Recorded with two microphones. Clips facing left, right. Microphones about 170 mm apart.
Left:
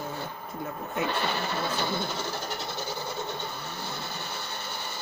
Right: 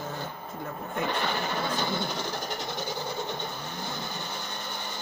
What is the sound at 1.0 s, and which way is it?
Speech, 15° right (ahead or behind).